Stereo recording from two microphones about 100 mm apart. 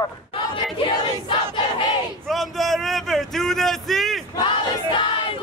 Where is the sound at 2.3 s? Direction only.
Centre (ahead or behind).